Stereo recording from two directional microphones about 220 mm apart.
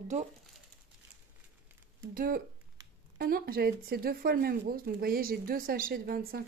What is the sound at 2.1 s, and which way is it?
Speech, 40° right (ahead or behind).